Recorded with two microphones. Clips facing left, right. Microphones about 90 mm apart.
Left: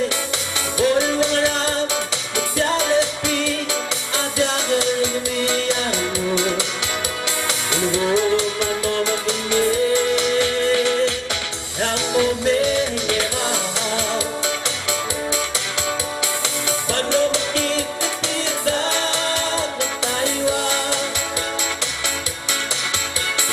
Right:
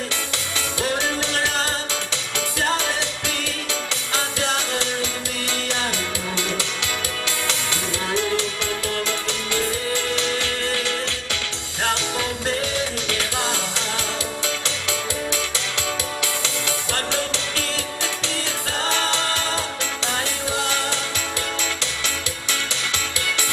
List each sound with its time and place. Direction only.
0.9 s music: 20° left (ahead or behind)
2.7 s music: 20° left (ahead or behind)
7.9 s music: 20° left (ahead or behind)
12.6 s music: 20° left (ahead or behind)
16.6 s music: 20° left (ahead or behind)